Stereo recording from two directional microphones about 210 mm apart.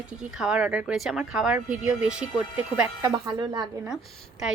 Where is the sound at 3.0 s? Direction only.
15° right (ahead or behind).